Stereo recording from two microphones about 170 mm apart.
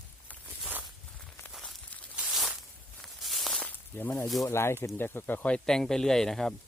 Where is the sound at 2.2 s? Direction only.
Centre (ahead or behind).